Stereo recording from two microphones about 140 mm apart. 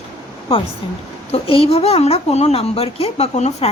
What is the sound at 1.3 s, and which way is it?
Speech, 40° left (ahead or behind).